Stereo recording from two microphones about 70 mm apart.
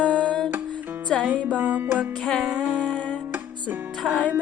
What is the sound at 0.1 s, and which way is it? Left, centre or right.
Music, centre.